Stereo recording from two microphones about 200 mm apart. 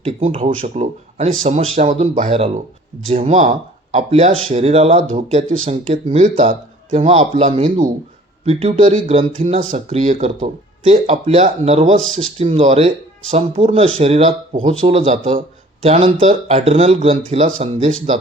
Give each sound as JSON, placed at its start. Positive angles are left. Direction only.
{"t": 0.0, "sound": "speech", "side_deg": -30}